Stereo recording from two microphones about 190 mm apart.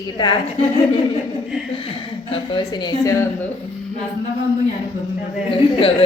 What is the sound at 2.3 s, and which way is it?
Speech, 25° left (ahead or behind).